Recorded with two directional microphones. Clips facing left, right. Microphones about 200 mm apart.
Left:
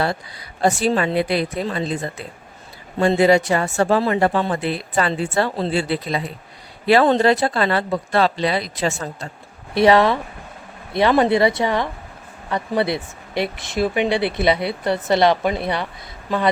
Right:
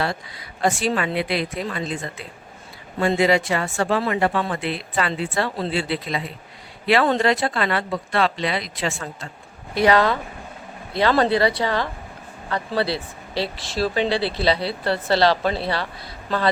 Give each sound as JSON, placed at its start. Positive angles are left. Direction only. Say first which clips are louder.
{"t": 0.6, "sound": "speech", "louder": "left 3 dB", "side_deg": 40}
{"t": 9.7, "sound": "speech", "louder": "left 3 dB", "side_deg": 25}